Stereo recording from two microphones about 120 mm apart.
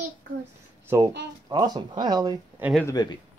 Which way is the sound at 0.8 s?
25° right (ahead or behind).